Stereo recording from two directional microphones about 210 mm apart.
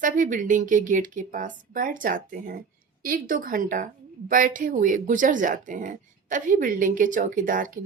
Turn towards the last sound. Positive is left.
turn(degrees=-40)  # may be behind; listen again after turning